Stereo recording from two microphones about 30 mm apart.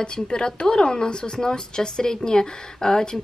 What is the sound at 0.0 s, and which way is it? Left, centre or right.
Speech, left.